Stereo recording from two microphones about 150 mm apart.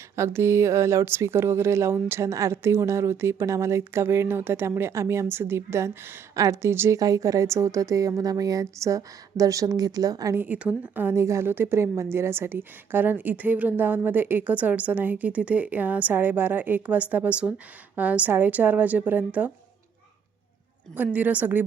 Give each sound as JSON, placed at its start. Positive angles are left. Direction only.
{"t": 0.2, "sound": "speech", "side_deg": -15}
{"t": 10.4, "sound": "a woman's voice", "side_deg": -10}
{"t": 20.9, "sound": "a woman's voice", "side_deg": -10}